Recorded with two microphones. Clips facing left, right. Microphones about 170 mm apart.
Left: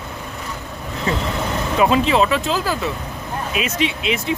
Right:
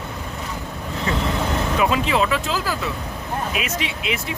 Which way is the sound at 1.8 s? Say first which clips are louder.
Left 5 dB; 30° left (ahead or behind).